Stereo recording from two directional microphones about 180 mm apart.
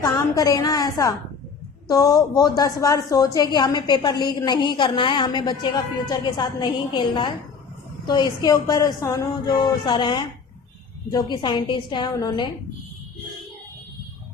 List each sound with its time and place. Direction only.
0.0 s a woman's voice: 20° left (ahead or behind)